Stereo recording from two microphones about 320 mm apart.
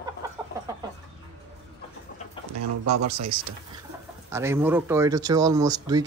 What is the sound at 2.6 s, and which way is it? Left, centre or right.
Speech, right.